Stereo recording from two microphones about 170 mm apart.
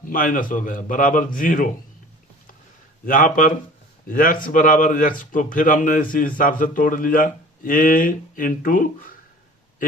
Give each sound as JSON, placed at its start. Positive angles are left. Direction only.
{"t": 0.0, "sound": "speech", "side_deg": 55}
{"t": 3.1, "sound": "speech", "side_deg": 50}